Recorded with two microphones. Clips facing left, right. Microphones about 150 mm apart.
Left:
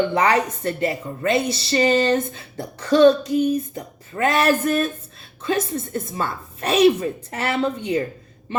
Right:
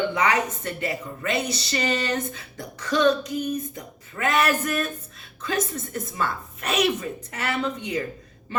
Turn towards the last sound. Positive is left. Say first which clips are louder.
# left 5 dB
turn(degrees=30)  # may be behind; listen again after turning